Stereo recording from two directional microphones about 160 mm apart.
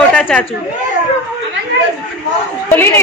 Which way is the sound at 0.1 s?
10° left (ahead or behind).